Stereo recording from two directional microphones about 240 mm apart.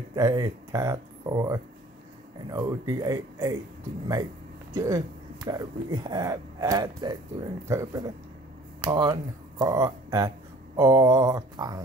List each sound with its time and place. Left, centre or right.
0.1 s speech: centre
4.7 s speech: centre